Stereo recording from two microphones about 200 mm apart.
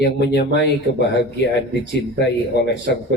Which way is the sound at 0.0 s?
55° left (ahead or behind).